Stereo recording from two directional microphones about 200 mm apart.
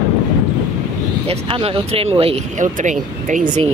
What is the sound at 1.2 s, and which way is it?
Speech, 30° right (ahead or behind).